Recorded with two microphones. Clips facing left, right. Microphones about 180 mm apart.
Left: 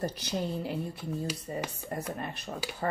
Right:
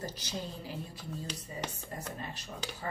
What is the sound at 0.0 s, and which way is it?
A woman's voice, 60° left (ahead or behind).